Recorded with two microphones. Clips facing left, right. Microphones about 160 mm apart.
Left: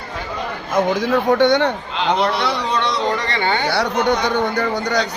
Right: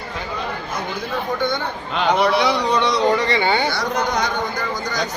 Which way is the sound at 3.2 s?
10° right (ahead or behind).